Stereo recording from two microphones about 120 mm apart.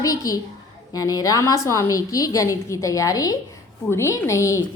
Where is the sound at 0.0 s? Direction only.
30° left (ahead or behind).